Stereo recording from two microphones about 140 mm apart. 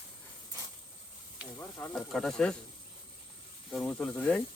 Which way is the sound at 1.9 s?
Centre (ahead or behind).